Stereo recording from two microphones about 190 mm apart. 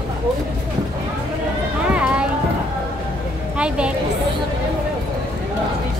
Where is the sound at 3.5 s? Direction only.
5° right (ahead or behind).